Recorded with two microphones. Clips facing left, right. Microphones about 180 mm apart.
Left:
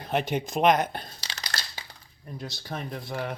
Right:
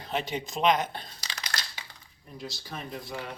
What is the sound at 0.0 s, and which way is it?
Speech, 55° left (ahead or behind).